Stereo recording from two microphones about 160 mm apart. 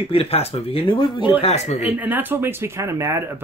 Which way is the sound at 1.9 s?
10° right (ahead or behind).